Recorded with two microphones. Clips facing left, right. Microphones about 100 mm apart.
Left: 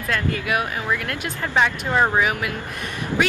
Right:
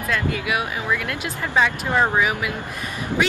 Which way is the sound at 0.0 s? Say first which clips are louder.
Even; 20° right (ahead or behind).